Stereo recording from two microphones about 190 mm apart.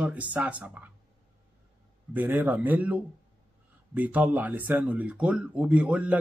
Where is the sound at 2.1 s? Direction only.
10° right (ahead or behind).